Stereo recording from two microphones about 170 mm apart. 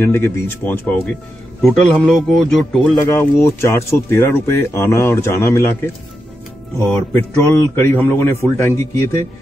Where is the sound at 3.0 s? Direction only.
15° left (ahead or behind).